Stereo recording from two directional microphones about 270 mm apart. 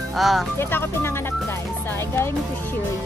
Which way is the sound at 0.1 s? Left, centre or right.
Centre.